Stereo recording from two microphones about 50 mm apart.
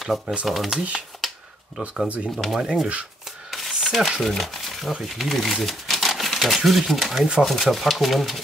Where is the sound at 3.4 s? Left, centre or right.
Centre.